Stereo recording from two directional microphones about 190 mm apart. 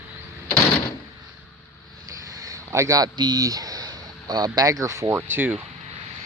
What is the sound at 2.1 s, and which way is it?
Speech, 20° right (ahead or behind).